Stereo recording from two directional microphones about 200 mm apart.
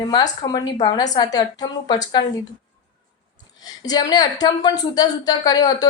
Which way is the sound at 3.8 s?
20° left (ahead or behind).